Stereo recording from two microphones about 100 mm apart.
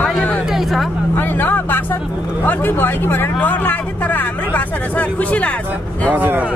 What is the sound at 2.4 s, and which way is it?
Speech, 20° left (ahead or behind).